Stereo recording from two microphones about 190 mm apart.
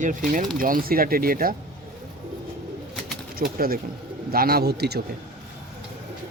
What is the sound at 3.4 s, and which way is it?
Speech, 50° right (ahead or behind).